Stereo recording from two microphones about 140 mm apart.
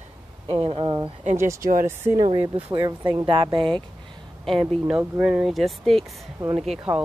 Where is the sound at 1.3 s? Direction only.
20° right (ahead or behind).